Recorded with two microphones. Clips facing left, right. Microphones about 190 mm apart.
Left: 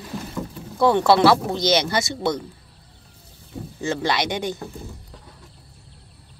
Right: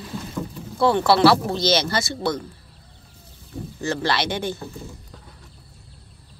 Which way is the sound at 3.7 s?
15° left (ahead or behind).